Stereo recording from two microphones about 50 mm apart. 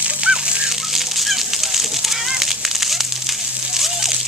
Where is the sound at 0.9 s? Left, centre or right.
Centre.